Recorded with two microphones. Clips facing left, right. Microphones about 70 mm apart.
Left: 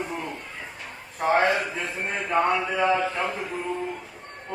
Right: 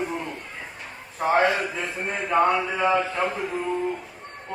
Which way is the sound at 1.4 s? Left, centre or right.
Left.